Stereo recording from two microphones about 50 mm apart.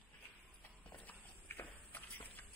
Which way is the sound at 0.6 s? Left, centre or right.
Left.